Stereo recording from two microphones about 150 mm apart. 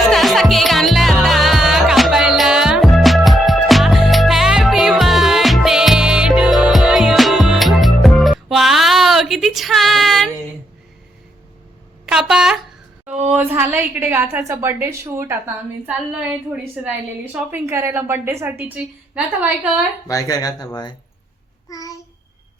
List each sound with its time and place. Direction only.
0.1 s music: centre (ahead or behind)
12.0 s a sound: 5° right (ahead or behind)
15.9 s a woman's voice: 10° right (ahead or behind)
20.1 s speech: 25° left (ahead or behind)